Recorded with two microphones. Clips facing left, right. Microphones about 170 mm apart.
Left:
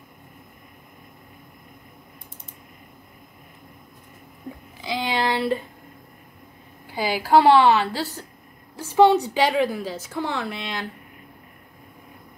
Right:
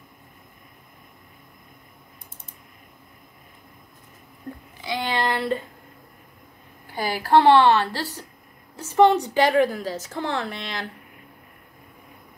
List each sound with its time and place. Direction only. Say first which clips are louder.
5.0 s a woman's voice: left 2 dB; 5° left (ahead or behind)
7.0 s a woman's voice: left 1 dB; 5° left (ahead or behind)
8.9 s a woman's voice: left 1 dB; 5° left (ahead or behind)